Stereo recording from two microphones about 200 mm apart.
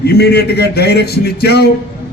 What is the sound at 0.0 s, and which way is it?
A man's voice, 55° left (ahead or behind).